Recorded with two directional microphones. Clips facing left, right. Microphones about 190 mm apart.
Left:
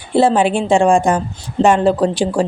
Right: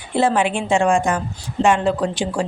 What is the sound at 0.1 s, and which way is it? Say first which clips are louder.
Speech: left 5 dB; 30° left (ahead or behind).